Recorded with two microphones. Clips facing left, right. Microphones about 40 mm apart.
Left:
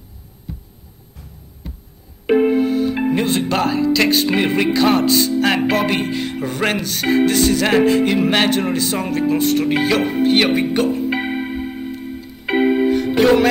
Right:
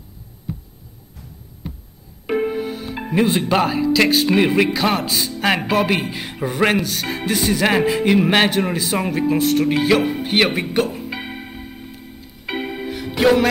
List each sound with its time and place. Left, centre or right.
2.2 s music: left
2.5 s music: centre
11.1 s music: left
13.2 s music: centre